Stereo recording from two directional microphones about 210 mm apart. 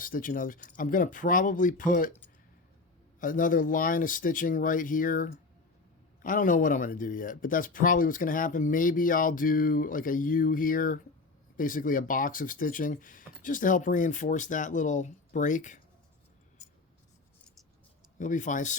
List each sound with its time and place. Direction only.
0.0 s speech: 40° left (ahead or behind)
3.2 s speech: 40° left (ahead or behind)
18.2 s speech: 35° left (ahead or behind)